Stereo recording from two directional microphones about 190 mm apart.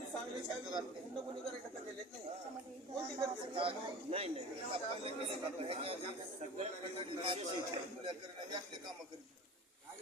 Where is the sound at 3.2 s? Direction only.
30° right (ahead or behind).